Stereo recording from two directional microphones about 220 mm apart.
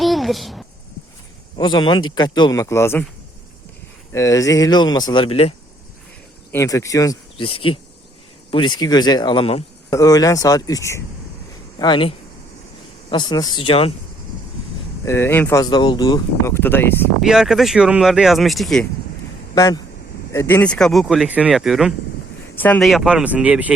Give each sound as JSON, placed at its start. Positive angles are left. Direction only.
{"t": 0.0, "sound": "a sound", "side_deg": 0}
{"t": 1.5, "sound": "speech", "side_deg": 20}
{"t": 4.1, "sound": "speech", "side_deg": 15}
{"t": 6.5, "sound": "speech", "side_deg": 15}
{"t": 8.4, "sound": "speech", "side_deg": 20}
{"t": 15.0, "sound": "speech", "side_deg": 10}
{"t": 17.2, "sound": "speech", "side_deg": 0}
{"t": 19.5, "sound": "speech", "side_deg": 15}